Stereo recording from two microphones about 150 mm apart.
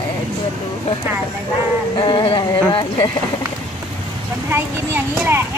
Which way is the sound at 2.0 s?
35° left (ahead or behind).